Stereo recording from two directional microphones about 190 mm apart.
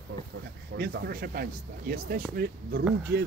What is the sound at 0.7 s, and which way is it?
Speech, 60° right (ahead or behind).